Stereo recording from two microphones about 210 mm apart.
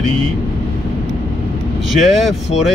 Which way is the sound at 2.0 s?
Centre (ahead or behind).